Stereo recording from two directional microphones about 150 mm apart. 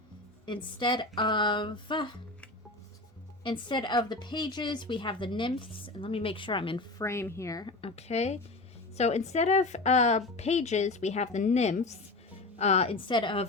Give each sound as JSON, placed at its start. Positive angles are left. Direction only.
{"t": 0.4, "sound": "speech", "side_deg": 30}
{"t": 3.4, "sound": "speech", "side_deg": 30}
{"t": 7.0, "sound": "speech", "side_deg": 20}
{"t": 7.8, "sound": "a woman's voice", "side_deg": 40}
{"t": 13.1, "sound": "speech", "side_deg": 30}